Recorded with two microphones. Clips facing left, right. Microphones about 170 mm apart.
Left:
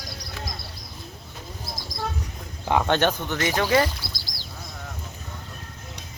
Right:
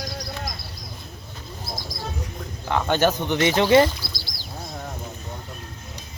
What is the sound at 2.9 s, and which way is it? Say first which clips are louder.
Speech: right 4 dB; 5° right (ahead or behind).